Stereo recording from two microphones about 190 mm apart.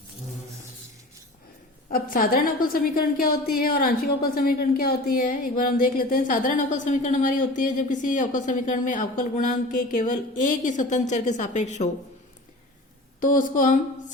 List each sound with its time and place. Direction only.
1.9 s a woman's voice: 50° left (ahead or behind)
13.2 s a woman's voice: 45° left (ahead or behind)